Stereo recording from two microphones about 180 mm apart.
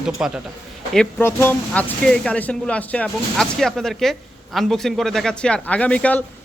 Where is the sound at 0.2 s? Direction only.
5° right (ahead or behind).